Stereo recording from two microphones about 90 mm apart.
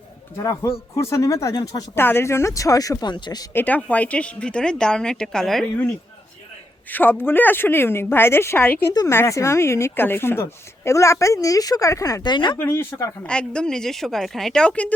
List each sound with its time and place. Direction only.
0.3 s a woman's voice: 35° left (ahead or behind)
2.0 s a woman's voice: 25° left (ahead or behind); by 3.4 s 55° left (ahead or behind)
3.5 s a woman's voice: 20° left (ahead or behind)
6.9 s speech: 20° left (ahead or behind)
9.0 s a woman's voice: 30° left (ahead or behind)
12.2 s speech: 55° left (ahead or behind)
12.5 s speech: 30° left (ahead or behind)
13.2 s a woman's voice: 10° left (ahead or behind)